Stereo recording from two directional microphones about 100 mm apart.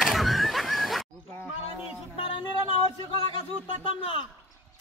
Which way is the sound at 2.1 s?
65° left (ahead or behind).